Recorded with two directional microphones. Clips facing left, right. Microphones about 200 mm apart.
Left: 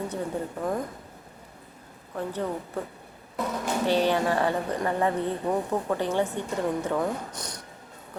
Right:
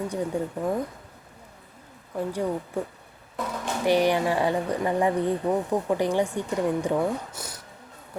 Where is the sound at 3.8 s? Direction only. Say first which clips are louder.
Right 3 dB; 15° right (ahead or behind).